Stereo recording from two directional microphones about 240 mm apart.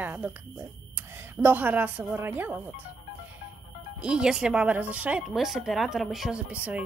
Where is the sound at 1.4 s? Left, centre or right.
Centre.